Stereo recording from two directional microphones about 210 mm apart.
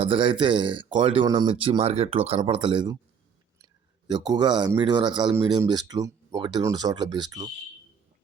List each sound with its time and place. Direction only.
0.0 s speech: 25° right (ahead or behind)
4.0 s speech: 20° right (ahead or behind)